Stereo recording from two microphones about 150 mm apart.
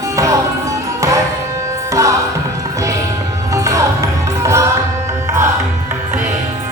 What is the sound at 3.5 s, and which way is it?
Music, 20° right (ahead or behind).